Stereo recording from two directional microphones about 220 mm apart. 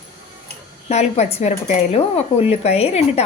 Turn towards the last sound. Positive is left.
turn(degrees=30)  # may be behind; listen again after turning